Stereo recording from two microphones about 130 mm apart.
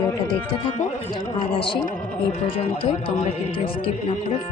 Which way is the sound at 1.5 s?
45° left (ahead or behind).